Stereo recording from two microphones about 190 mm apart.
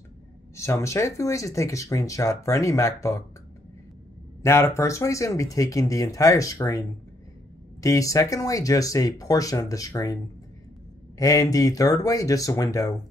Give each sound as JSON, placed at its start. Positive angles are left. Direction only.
{"t": 0.6, "sound": "speech", "side_deg": 15}
{"t": 4.4, "sound": "speech", "side_deg": 15}
{"t": 7.8, "sound": "speech", "side_deg": 15}
{"t": 11.1, "sound": "speech", "side_deg": 20}